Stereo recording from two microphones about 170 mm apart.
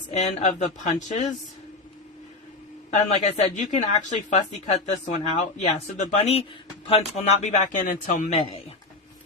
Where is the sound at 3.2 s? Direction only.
40° left (ahead or behind).